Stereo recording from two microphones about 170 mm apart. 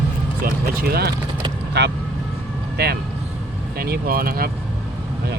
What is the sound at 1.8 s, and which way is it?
Speech, 80° right.